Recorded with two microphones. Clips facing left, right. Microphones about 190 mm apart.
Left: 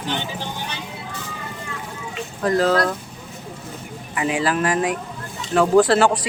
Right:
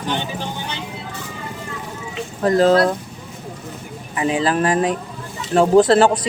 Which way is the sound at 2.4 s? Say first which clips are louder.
Right 4 dB; 25° right (ahead or behind).